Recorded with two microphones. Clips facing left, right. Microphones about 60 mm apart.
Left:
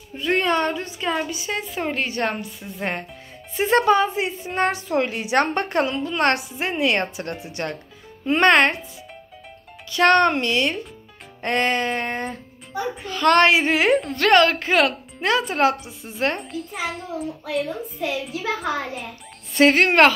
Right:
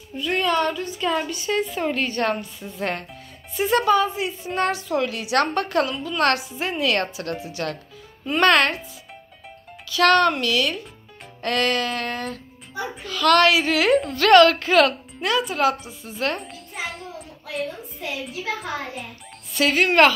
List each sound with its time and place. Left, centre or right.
0.2 s a woman's voice: left
0.9 s a woman's voice: centre
3.5 s a woman's voice: left
9.8 s a woman's voice: left
13.9 s a child's voice: centre
14.2 s a woman's voice: centre
15.2 s a woman's voice: left
15.8 s a woman's voice: centre
16.3 s a child's voice: centre
19.5 s a woman's voice: left